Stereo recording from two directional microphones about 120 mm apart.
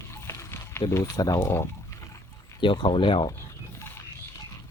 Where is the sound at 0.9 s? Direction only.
25° left (ahead or behind).